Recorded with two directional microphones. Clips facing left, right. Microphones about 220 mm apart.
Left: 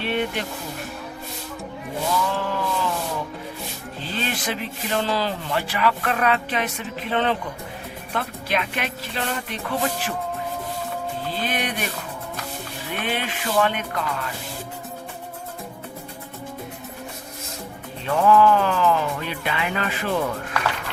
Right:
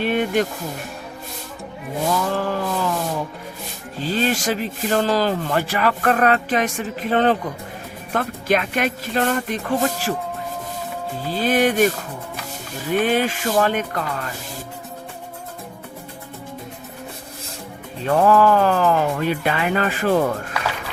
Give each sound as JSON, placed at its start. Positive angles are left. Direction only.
{"t": 0.0, "sound": "music", "side_deg": -45}
{"t": 2.3, "sound": "speech", "side_deg": -45}
{"t": 4.0, "sound": "speech", "side_deg": -40}
{"t": 11.3, "sound": "speech", "side_deg": -45}
{"t": 12.9, "sound": "speech", "side_deg": -40}
{"t": 18.0, "sound": "speech", "side_deg": -45}
{"t": 20.5, "sound": "music", "side_deg": -10}